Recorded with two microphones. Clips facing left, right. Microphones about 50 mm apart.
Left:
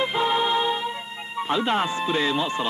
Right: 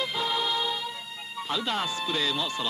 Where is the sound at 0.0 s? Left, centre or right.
Left.